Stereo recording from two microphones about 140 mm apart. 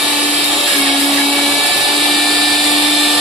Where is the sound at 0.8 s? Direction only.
Centre (ahead or behind).